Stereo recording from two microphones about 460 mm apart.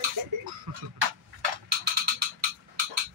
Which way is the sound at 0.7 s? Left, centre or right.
Right.